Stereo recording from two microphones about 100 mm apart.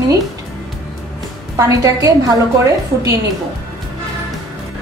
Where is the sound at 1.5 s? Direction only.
35° right (ahead or behind).